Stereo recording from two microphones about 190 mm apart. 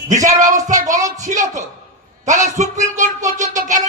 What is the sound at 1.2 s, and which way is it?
A man's voice, 40° right (ahead or behind).